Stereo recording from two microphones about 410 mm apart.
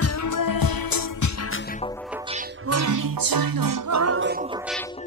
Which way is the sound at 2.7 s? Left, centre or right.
Right.